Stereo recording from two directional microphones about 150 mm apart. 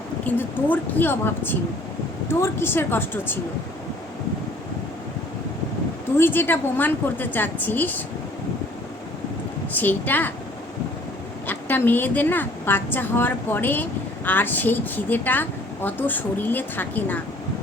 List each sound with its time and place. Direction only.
0.3 s a woman's voice: 10° left (ahead or behind)
6.1 s a woman's voice: 15° left (ahead or behind)
9.7 s a woman's voice: 10° left (ahead or behind)
11.4 s a woman's voice: 10° left (ahead or behind)